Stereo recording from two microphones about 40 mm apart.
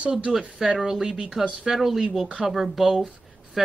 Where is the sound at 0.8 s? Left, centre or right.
Centre.